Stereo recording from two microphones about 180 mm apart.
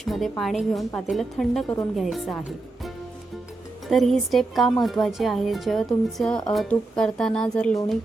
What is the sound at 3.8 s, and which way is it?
Speech, centre (ahead or behind).